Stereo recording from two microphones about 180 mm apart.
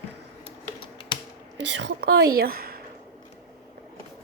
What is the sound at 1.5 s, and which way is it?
A woman's voice, 80° right.